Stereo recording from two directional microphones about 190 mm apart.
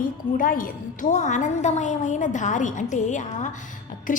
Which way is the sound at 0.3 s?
45° left (ahead or behind).